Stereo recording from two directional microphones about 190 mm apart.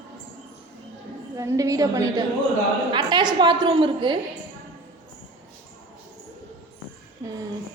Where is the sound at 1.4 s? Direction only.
15° right (ahead or behind).